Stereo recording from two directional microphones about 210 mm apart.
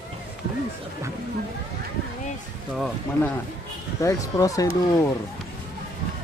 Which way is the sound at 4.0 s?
15° left (ahead or behind).